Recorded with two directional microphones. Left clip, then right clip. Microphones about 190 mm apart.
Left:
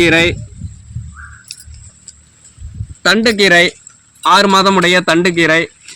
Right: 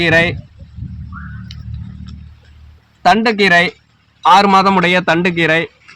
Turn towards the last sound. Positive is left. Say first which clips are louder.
# left 3 dB
turn(degrees=-15)  # may be behind; listen again after turning